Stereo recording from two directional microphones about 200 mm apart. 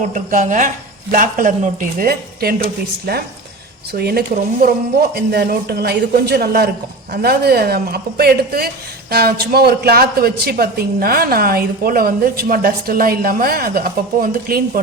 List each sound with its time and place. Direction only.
0.1 s a woman's voice: 40° right (ahead or behind)